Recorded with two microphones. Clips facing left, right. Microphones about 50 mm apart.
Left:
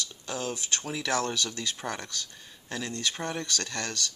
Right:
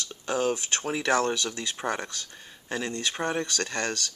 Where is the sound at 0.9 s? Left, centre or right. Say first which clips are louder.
Right 5 dB; right.